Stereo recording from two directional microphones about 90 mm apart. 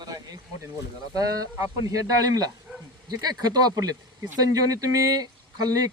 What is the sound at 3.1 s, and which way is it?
Speech, 45° right (ahead or behind).